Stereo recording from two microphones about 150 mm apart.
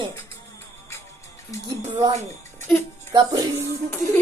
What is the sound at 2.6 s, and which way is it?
Speech, 15° left (ahead or behind).